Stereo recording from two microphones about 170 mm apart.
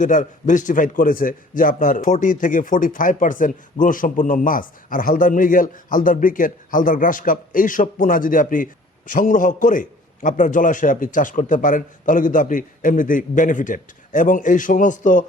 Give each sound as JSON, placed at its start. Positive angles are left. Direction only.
{"t": 0.0, "sound": "a man's voice", "side_deg": 50}